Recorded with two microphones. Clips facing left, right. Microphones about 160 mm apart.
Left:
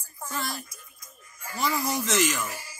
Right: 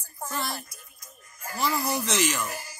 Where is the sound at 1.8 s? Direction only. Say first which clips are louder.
Left 1 dB; centre (ahead or behind).